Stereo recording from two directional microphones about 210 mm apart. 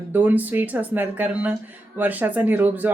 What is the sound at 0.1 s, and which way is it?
Speech, 10° right (ahead or behind).